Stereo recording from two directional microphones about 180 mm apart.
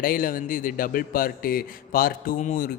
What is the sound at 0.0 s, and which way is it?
Speech, 50° left (ahead or behind).